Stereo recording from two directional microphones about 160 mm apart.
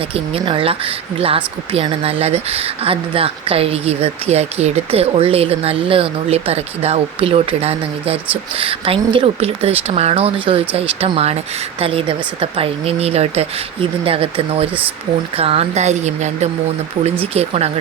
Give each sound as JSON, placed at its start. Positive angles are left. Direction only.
{"t": 0.1, "sound": "speech", "side_deg": -35}